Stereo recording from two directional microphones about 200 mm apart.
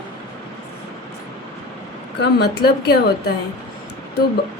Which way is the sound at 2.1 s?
55° left (ahead or behind).